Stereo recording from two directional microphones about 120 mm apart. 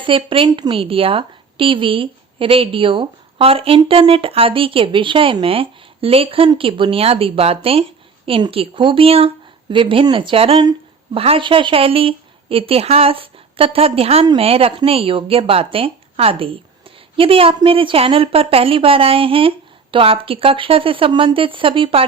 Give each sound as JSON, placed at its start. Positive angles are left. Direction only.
{"t": 0.0, "sound": "a woman's voice", "side_deg": -45}
{"t": 10.6, "sound": "a sound", "side_deg": -35}
{"t": 11.2, "sound": "a woman's voice", "side_deg": -50}